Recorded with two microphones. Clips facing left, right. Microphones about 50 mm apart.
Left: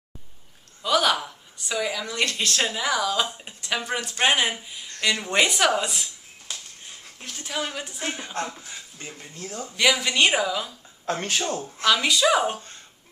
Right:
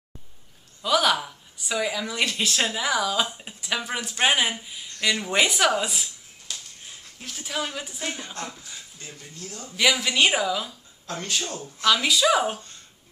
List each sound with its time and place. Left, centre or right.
0.8 s a woman's voice: centre
7.2 s a woman's voice: centre
8.0 s a woman's voice: centre
8.5 s speech: left
9.8 s a woman's voice: centre
11.1 s speech: left
11.8 s a woman's voice: centre